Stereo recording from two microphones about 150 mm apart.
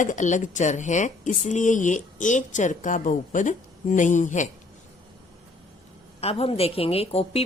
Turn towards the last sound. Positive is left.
turn(degrees=40)  # may be behind; listen again after turning